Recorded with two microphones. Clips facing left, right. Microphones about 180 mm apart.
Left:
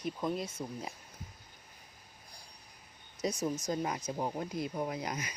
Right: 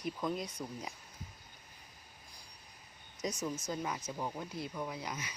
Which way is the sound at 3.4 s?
35° left (ahead or behind).